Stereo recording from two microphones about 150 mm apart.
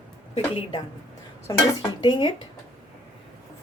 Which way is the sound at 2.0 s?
30° left (ahead or behind).